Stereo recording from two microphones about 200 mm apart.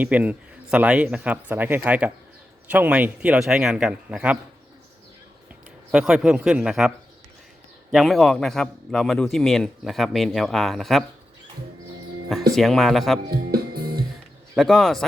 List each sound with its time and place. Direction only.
0.0 s a man's voice: 5° right (ahead or behind)
5.9 s a man's voice: 5° right (ahead or behind)
12.5 s a man's voice: centre (ahead or behind)
13.3 s music: 50° right (ahead or behind)
14.5 s a man's voice: centre (ahead or behind)